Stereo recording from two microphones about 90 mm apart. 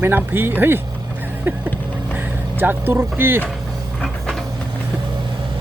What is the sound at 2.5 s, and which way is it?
Speech, 20° right (ahead or behind).